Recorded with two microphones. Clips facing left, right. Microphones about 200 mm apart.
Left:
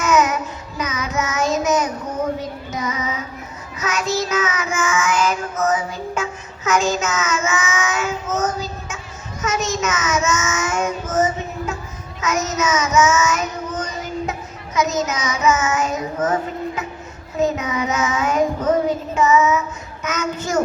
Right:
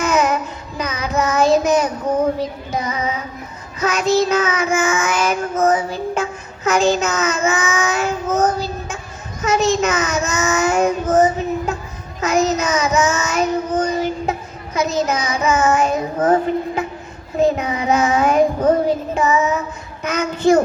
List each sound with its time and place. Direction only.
0.0 s child singing: 30° right (ahead or behind)